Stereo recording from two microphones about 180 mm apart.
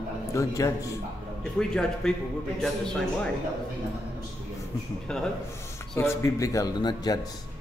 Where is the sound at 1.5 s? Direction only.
5° left (ahead or behind).